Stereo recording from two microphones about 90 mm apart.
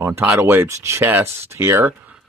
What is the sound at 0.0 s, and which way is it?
Speech, 25° right (ahead or behind).